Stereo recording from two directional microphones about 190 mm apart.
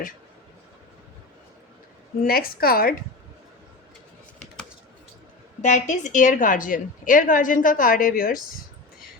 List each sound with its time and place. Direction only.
2.2 s a woman's voice: 50° left (ahead or behind)
5.6 s a woman's voice: 40° left (ahead or behind)